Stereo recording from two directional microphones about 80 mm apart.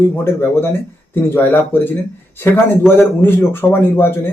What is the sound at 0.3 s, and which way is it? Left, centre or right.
A man's voice, left.